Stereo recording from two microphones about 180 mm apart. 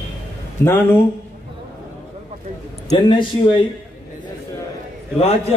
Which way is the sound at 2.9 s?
25° left (ahead or behind).